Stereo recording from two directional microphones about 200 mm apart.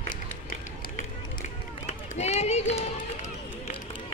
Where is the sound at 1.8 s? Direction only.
35° left (ahead or behind).